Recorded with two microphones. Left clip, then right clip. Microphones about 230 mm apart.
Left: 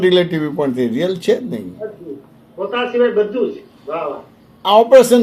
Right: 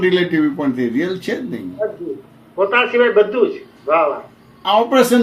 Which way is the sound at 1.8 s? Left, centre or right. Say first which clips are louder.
Right 9 dB; right.